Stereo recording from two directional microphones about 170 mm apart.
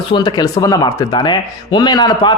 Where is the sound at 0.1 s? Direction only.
25° left (ahead or behind).